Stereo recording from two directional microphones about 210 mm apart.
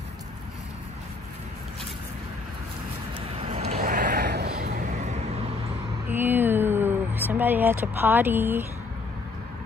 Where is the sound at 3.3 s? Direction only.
30° right (ahead or behind).